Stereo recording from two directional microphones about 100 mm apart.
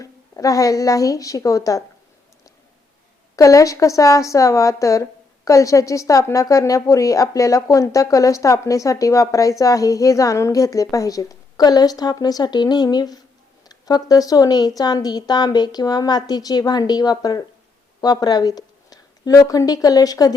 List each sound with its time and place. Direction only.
0.0 s a woman's voice: 35° left (ahead or behind)
3.3 s a woman's voice: 35° left (ahead or behind)